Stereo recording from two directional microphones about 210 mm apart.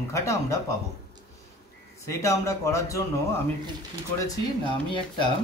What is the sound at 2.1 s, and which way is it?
Speech, 15° left (ahead or behind).